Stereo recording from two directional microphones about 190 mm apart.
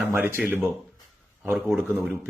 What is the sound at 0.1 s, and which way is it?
Speech, 10° right (ahead or behind).